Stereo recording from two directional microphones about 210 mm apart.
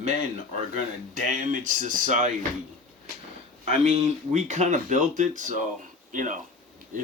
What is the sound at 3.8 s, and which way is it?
A man's voice, 30° right (ahead or behind).